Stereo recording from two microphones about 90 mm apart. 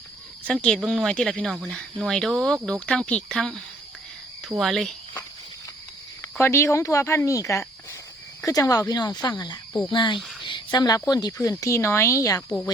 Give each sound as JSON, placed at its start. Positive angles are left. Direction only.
{"t": 0.4, "sound": "speech", "side_deg": 10}
{"t": 6.4, "sound": "speech", "side_deg": 30}